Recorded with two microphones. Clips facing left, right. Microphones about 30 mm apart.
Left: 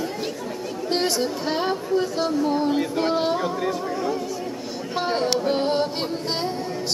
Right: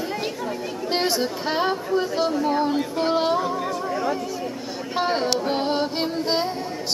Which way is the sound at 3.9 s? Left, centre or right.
Centre.